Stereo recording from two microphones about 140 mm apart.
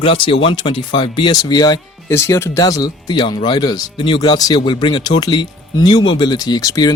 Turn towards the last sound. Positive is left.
turn(degrees=25)  # may be behind; listen again after turning